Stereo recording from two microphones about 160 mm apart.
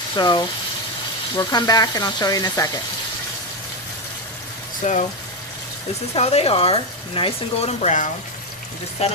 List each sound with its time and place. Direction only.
0.2 s speech: 25° left (ahead or behind)
4.8 s speech: 50° left (ahead or behind)
6.1 s speech: 40° left (ahead or behind)